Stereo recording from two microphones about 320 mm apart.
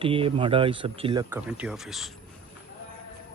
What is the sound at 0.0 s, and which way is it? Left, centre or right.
Speech, centre.